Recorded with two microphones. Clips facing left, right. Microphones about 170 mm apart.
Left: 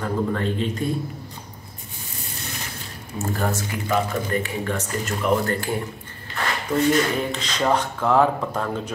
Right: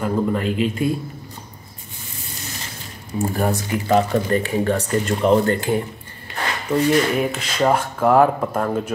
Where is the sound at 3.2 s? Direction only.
15° right (ahead or behind).